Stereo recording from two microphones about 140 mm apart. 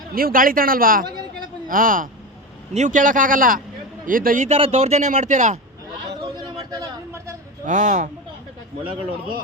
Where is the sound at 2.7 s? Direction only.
65° right (ahead or behind); by 4.4 s 80° right.